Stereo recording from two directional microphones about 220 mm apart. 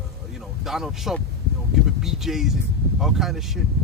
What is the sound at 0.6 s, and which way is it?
Speech, centre (ahead or behind).